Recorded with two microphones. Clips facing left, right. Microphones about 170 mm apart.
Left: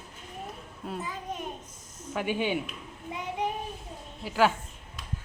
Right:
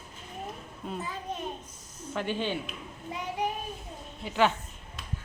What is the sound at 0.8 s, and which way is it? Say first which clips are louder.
Speech: even; 5° left (ahead or behind).